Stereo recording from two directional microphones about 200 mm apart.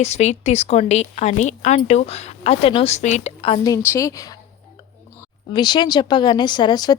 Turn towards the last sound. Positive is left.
turn(degrees=20)  # may be behind; listen again after turning